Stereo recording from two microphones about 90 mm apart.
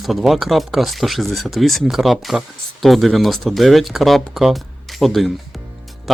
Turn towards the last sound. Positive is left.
turn(degrees=0)  # may be behind; listen again after turning